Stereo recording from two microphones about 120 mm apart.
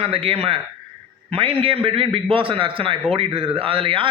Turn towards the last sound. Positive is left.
turn(degrees=-45)  # may be behind; listen again after turning